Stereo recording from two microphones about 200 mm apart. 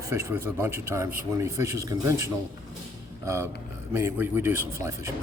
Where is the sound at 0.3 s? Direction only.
10° right (ahead or behind).